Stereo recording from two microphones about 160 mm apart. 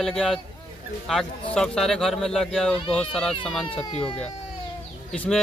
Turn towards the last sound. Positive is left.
turn(degrees=10)  # may be behind; listen again after turning